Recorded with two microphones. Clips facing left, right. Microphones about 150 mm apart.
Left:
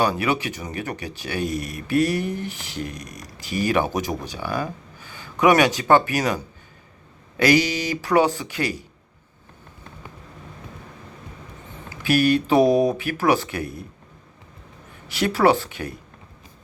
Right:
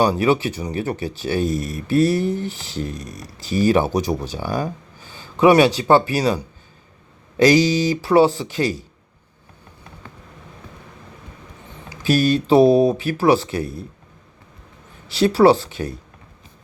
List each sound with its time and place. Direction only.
0.0 s speech: 35° right (ahead or behind)
12.0 s speech: 35° right (ahead or behind)
15.0 s speech: 35° right (ahead or behind)